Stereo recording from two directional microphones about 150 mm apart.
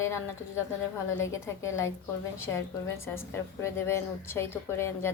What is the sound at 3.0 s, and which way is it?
A woman's voice, 15° left (ahead or behind).